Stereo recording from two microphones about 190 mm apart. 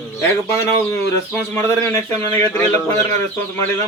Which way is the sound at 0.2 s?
15° left (ahead or behind).